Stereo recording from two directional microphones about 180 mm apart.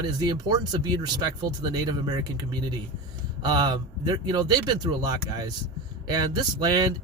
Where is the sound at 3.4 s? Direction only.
25° right (ahead or behind).